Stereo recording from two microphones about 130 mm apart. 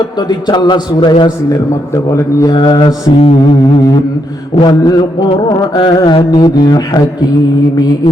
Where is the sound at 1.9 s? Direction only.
20° left (ahead or behind).